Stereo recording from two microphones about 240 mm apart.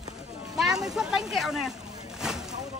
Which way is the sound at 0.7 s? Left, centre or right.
Centre.